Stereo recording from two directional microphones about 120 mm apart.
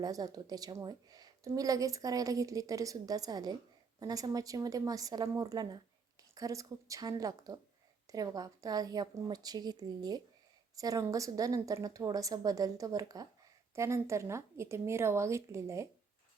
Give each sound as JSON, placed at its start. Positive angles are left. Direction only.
{"t": 0.0, "sound": "a woman's voice", "side_deg": -30}